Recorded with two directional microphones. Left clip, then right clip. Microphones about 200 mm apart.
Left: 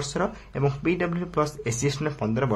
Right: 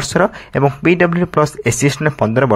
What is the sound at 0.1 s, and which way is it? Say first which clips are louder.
Speech: right 17 dB; 40° right (ahead or behind).